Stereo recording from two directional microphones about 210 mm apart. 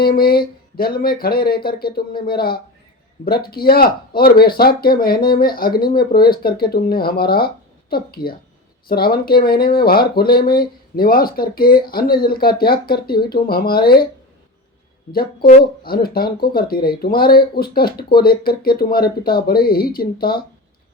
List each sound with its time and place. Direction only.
0.0 s speech: 45° left (ahead or behind)
15.1 s speech: 45° left (ahead or behind)